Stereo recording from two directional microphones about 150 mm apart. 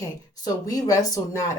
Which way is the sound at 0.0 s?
25° left (ahead or behind).